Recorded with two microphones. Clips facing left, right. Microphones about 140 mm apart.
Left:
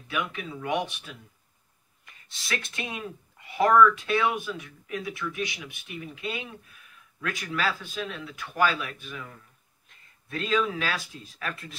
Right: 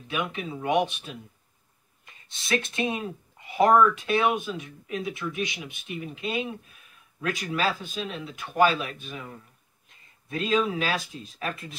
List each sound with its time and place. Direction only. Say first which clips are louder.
0.1 s speech: right 2 dB; 25° right (ahead or behind)